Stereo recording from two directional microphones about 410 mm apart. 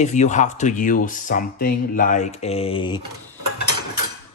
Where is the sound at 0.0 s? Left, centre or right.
Centre.